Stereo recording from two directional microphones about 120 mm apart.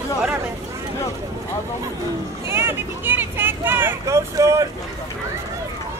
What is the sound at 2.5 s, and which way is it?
Speech, 20° right (ahead or behind).